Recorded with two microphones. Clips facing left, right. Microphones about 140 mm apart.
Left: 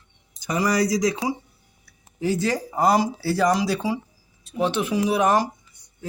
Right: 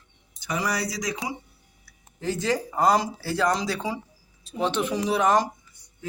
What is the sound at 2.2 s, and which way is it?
Speech, 10° left (ahead or behind).